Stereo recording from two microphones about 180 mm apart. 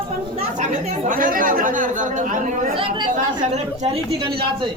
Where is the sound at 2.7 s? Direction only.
30° right (ahead or behind).